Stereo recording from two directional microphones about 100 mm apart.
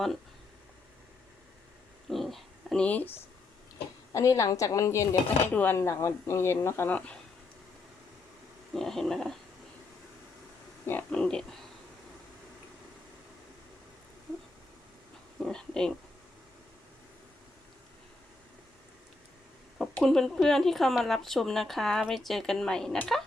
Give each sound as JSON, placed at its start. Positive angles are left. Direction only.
{"t": 2.0, "sound": "a sound", "side_deg": 0}
{"t": 4.1, "sound": "a woman's voice", "side_deg": 30}
{"t": 8.7, "sound": "speech", "side_deg": 5}
{"t": 10.8, "sound": "a sound", "side_deg": 20}
{"t": 11.2, "sound": "speech", "side_deg": 5}
{"t": 15.4, "sound": "speech", "side_deg": 5}
{"t": 19.8, "sound": "speech", "side_deg": 0}